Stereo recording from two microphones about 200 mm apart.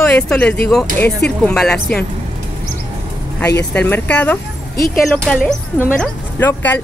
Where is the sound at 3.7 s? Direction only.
10° left (ahead or behind).